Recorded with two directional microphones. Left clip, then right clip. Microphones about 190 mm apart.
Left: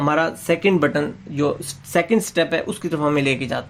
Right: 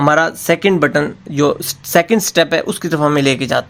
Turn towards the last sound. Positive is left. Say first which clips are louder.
# right 6 dB
turn(degrees=-30)  # may be behind; listen again after turning